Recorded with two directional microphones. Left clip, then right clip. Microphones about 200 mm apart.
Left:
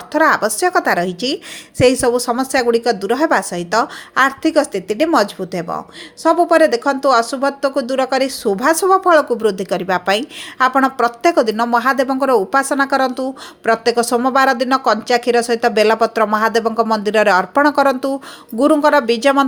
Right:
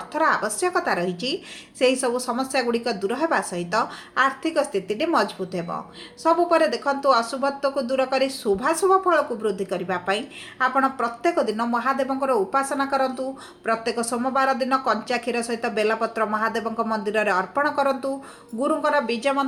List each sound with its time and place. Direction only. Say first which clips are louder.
0.1 s speech: left 8 dB; 45° left (ahead or behind)